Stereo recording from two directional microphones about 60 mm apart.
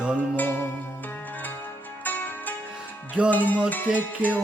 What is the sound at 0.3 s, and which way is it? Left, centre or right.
Music, left.